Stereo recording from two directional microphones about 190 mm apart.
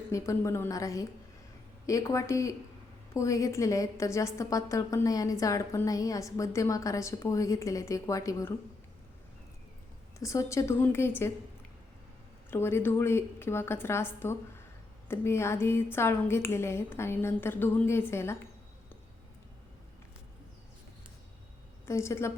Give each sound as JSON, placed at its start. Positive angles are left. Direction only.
{"t": 0.1, "sound": "a woman's voice", "side_deg": 15}
{"t": 10.2, "sound": "a woman's voice", "side_deg": 15}
{"t": 12.5, "sound": "a woman's voice", "side_deg": 10}
{"t": 21.8, "sound": "a woman's voice", "side_deg": 15}